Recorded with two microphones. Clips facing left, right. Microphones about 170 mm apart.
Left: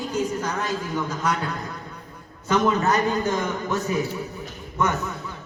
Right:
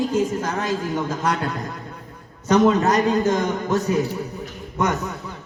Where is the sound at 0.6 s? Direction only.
Centre (ahead or behind).